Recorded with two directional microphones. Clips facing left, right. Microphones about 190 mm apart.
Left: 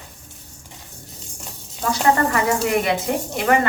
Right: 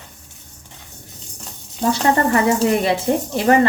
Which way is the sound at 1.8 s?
30° right (ahead or behind).